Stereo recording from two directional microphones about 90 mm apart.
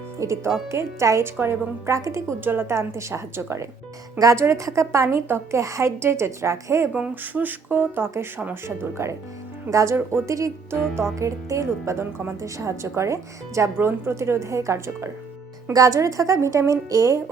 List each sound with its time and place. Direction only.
0.2 s a woman's voice: 30° right (ahead or behind)
2.4 s a woman's voice: 25° right (ahead or behind)
6.9 s a woman's voice: 15° right (ahead or behind); by 17.2 s 35° right (ahead or behind)